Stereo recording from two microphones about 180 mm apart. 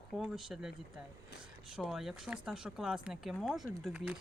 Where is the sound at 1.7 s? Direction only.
Centre (ahead or behind).